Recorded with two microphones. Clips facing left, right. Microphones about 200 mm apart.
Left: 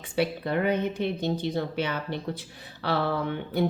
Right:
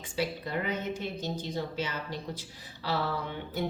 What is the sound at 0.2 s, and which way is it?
A woman's voice, 60° left (ahead or behind).